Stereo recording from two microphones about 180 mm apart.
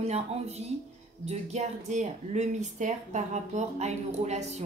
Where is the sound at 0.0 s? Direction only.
35° right (ahead or behind).